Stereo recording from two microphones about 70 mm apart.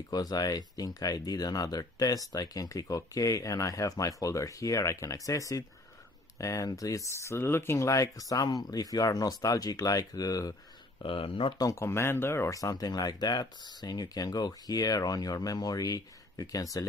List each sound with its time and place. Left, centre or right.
0.1 s speech: left
11.7 s speech: left
12.5 s speech: left